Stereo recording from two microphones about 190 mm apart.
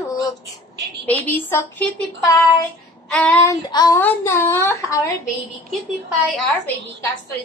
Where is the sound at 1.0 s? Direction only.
10° left (ahead or behind).